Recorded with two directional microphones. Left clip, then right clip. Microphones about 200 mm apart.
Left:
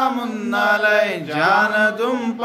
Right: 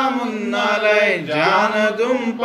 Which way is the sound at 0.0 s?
25° left (ahead or behind).